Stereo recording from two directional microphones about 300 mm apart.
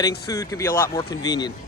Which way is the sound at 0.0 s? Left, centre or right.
Centre.